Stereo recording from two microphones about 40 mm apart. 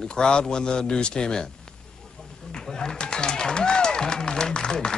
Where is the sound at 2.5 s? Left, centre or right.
Centre.